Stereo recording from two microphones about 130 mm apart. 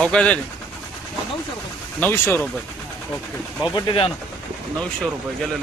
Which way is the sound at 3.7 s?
40° left (ahead or behind).